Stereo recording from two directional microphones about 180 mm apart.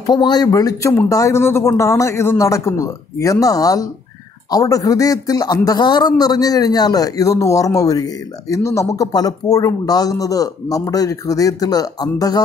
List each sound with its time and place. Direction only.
0.0 s a man's voice: 25° left (ahead or behind)